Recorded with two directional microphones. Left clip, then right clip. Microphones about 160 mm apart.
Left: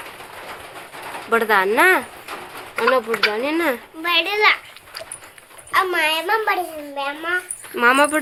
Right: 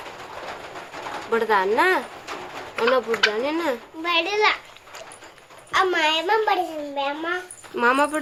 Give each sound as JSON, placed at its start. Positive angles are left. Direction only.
{"t": 1.3, "sound": "speech", "side_deg": 30}
{"t": 3.1, "sound": "speech", "side_deg": 45}
{"t": 3.3, "sound": "speech", "side_deg": 25}
{"t": 4.0, "sound": "a child's voice", "side_deg": 0}
{"t": 5.7, "sound": "a child's voice", "side_deg": -20}
{"t": 7.8, "sound": "speech", "side_deg": 15}